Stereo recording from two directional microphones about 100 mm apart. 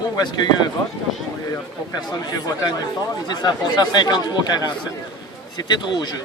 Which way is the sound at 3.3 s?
45° left (ahead or behind).